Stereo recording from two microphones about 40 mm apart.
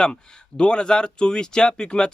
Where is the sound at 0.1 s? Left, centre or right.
Left.